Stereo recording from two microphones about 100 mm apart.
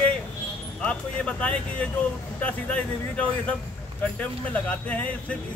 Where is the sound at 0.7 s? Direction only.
10° left (ahead or behind).